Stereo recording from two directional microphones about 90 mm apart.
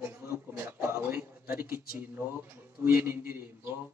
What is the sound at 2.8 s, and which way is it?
Speech, 20° right (ahead or behind).